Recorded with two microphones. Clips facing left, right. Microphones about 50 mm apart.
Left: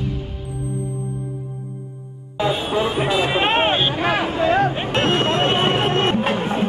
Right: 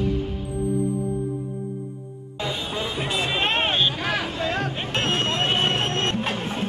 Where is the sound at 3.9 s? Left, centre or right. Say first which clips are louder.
Left 6 dB; left.